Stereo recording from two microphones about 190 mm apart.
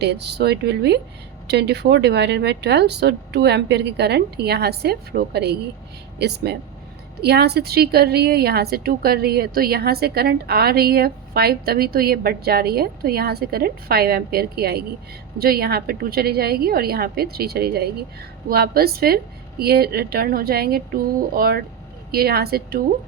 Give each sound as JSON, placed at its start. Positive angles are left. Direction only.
{"t": 0.0, "sound": "a woman's voice", "side_deg": -60}